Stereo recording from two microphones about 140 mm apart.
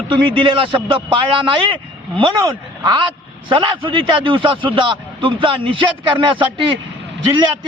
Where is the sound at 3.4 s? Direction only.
35° right (ahead or behind).